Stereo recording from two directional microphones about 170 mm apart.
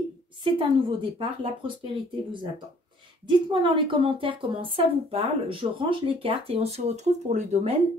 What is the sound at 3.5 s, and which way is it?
Speech, 30° right (ahead or behind).